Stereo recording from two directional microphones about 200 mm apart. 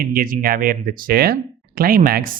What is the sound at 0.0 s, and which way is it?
Speech, 50° right (ahead or behind).